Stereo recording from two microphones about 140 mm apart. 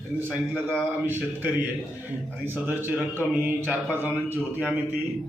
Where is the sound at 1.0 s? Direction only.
15° right (ahead or behind).